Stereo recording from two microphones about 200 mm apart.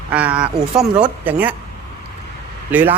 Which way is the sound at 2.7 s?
10° right (ahead or behind).